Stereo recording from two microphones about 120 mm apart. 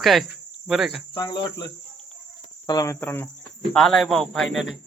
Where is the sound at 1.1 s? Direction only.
40° left (ahead or behind).